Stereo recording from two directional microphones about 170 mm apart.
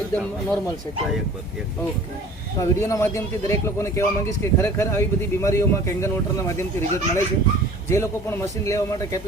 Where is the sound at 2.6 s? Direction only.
15° left (ahead or behind).